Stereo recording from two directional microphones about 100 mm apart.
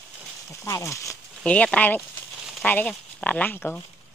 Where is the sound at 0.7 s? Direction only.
30° left (ahead or behind).